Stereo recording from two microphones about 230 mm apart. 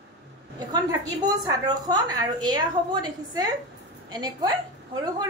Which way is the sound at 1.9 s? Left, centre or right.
Centre.